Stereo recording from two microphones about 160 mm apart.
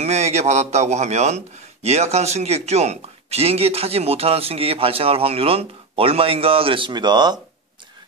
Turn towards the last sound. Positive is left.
turn(degrees=-25)  # may be behind; listen again after turning